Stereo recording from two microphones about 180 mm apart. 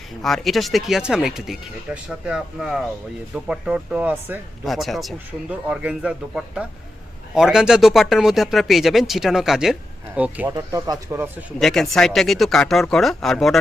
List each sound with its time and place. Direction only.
0.2 s speech: centre (ahead or behind)
4.6 s speech: centre (ahead or behind)
10.5 s speech: 20° right (ahead or behind)
11.6 s speech: centre (ahead or behind)